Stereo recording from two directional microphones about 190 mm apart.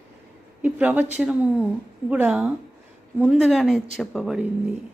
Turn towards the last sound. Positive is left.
turn(degrees=-5)  # may be behind; listen again after turning